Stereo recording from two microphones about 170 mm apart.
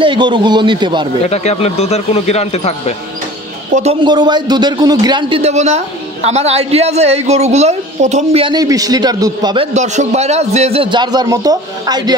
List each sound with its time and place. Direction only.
0.0 s a man's voice: 30° right (ahead or behind)
1.3 s speech: 40° left (ahead or behind)
3.7 s a man's voice: 35° right (ahead or behind)
5.4 s a woman's voice: 40° right (ahead or behind); by 9.7 s 25° right (ahead or behind)
9.8 s a man's voice: 40° right (ahead or behind); by 12.2 s 25° right (ahead or behind)